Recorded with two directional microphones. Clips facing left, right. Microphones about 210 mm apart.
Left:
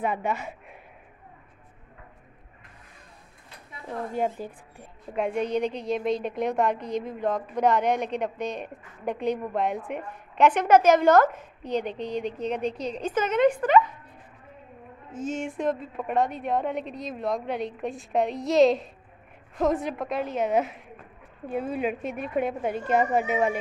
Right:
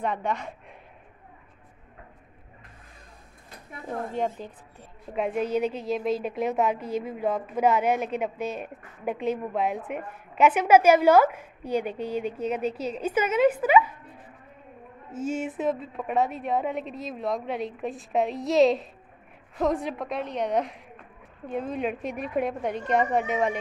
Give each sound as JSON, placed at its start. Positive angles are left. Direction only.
{"t": 0.0, "sound": "a woman's voice", "side_deg": 5}
{"t": 4.1, "sound": "a woman's voice", "side_deg": 5}
{"t": 5.1, "sound": "a woman's voice", "side_deg": 0}
{"t": 15.0, "sound": "a woman's voice", "side_deg": -5}